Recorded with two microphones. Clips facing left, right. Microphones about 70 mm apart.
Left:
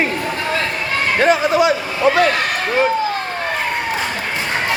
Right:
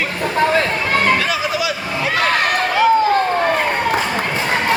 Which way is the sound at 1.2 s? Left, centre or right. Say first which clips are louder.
Left 6 dB; left.